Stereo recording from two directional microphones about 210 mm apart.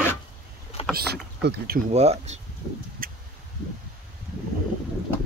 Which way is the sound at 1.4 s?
55° right (ahead or behind).